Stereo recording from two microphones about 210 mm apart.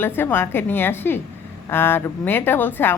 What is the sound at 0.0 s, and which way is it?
A woman's voice, 10° left (ahead or behind).